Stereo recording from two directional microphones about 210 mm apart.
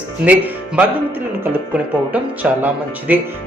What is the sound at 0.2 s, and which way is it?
Speech, 5° right (ahead or behind).